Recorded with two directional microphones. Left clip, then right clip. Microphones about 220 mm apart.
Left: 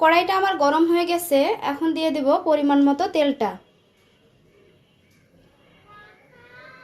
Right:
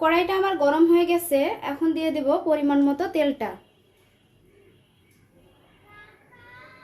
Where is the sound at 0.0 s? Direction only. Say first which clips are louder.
Left 4 dB; 25° left (ahead or behind).